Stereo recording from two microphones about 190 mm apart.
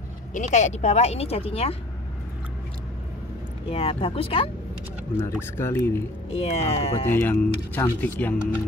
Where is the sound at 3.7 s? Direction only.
30° left (ahead or behind).